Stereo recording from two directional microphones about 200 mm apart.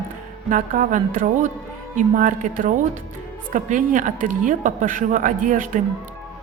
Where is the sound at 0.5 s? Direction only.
40° right (ahead or behind).